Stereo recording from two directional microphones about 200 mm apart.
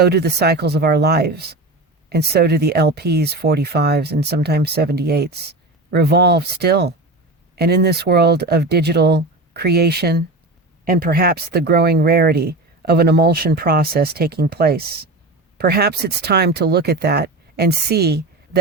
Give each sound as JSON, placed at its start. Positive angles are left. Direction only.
{"t": 0.0, "sound": "speech", "side_deg": -55}